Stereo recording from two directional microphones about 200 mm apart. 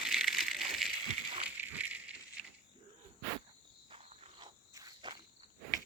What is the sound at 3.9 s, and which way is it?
Cricket, 30° right (ahead or behind).